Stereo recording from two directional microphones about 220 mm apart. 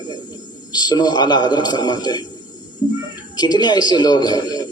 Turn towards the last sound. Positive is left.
turn(degrees=20)  # may be behind; listen again after turning